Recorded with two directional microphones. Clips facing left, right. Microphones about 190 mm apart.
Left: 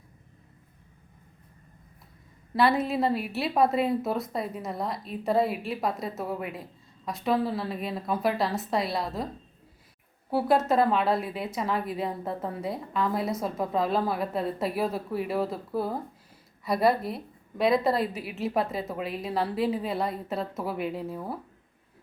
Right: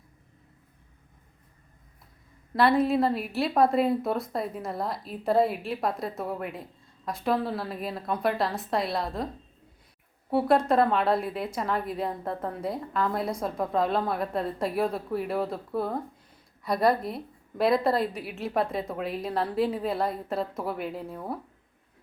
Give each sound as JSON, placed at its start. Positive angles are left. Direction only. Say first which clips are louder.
{"t": 2.6, "sound": "a woman's voice", "louder": "right 2 dB", "side_deg": 0}